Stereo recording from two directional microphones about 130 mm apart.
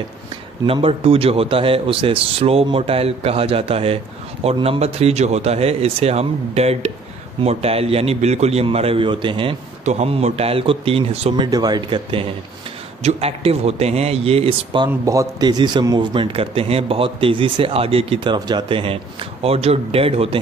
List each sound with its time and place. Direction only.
0.7 s speech: 45° right (ahead or behind)
9.8 s speech: 55° right (ahead or behind)
11.3 s a man's voice: 30° right (ahead or behind)
15.0 s a man's voice: 30° right (ahead or behind); by 20.3 s 50° right (ahead or behind)